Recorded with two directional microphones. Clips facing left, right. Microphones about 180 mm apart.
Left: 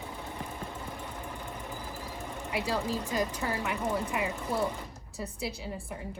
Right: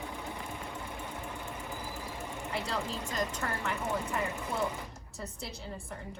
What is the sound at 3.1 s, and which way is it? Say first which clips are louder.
Speech: left 3 dB; 10° left (ahead or behind).